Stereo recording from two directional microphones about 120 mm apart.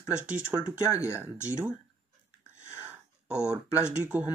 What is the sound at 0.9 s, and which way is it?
Speech, 25° left (ahead or behind).